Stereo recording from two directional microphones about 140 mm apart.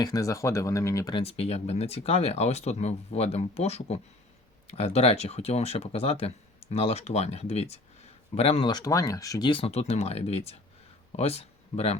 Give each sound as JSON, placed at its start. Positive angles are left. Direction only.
{"t": 0.0, "sound": "speech", "side_deg": 25}
{"t": 1.1, "sound": "speech", "side_deg": 45}
{"t": 8.7, "sound": "speech", "side_deg": 25}